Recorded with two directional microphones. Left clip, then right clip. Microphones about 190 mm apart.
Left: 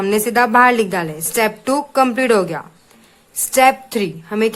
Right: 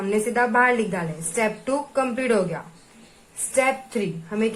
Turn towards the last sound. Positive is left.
turn(degrees=50)  # may be behind; listen again after turning